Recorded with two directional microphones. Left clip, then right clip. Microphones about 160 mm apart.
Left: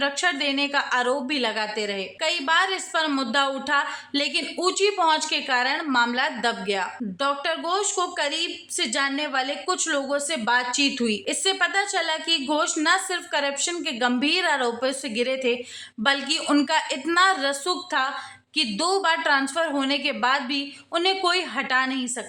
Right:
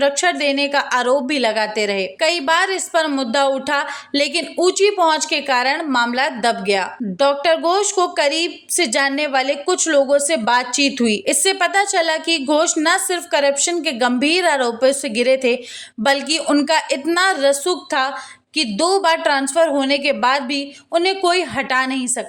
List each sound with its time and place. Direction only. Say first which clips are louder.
0.0 s a woman's voice: right 7 dB; 30° right (ahead or behind)